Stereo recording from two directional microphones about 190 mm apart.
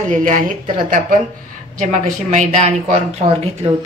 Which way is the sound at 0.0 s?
40° right (ahead or behind).